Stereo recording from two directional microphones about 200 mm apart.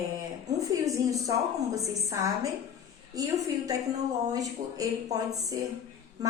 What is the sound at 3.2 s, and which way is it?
Speech, 20° right (ahead or behind).